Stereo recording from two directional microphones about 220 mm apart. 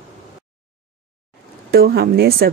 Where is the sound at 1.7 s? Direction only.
45° right (ahead or behind).